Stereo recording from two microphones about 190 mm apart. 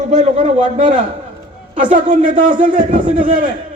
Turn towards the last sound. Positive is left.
turn(degrees=-45)  # may be behind; listen again after turning